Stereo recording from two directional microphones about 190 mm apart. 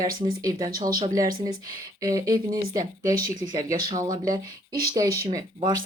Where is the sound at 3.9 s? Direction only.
20° right (ahead or behind).